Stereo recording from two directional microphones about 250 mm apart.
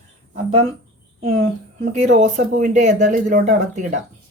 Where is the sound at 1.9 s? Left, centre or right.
Right.